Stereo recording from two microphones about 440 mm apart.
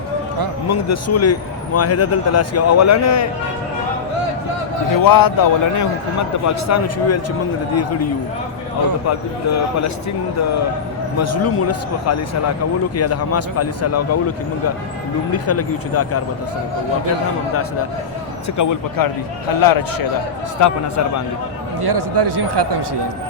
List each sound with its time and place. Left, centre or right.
0.7 s a man's voice: left
4.9 s a man's voice: left
11.2 s a man's voice: left
15.3 s a man's voice: left
18.5 s a man's voice: left
21.8 s speech: right